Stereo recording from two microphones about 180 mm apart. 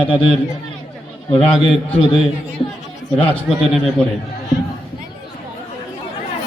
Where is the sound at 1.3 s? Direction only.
30° left (ahead or behind).